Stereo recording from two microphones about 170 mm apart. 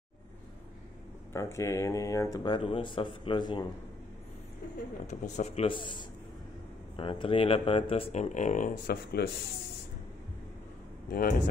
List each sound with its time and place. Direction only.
1.3 s speech: 15° left (ahead or behind)
5.0 s speech: 45° left (ahead or behind)
11.1 s speech: 60° left (ahead or behind)